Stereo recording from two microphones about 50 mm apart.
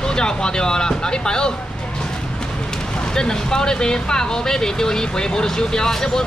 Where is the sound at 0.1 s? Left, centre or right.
Centre.